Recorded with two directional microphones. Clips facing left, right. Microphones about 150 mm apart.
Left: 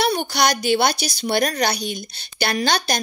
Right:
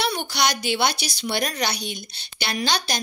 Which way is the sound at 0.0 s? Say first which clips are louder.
Left 4 dB; 45° left (ahead or behind).